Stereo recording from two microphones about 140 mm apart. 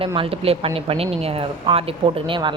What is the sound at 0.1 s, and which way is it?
A woman's voice, 40° right (ahead or behind).